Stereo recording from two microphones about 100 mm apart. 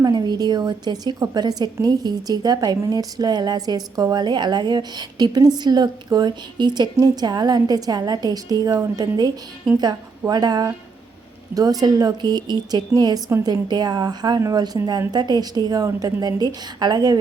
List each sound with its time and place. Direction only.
0.0 s a woman's voice: 45° right (ahead or behind)